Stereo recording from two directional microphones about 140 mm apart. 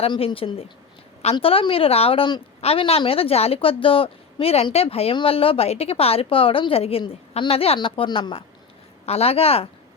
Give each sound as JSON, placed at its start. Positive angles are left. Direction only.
{"t": 0.0, "sound": "a woman's voice", "side_deg": 40}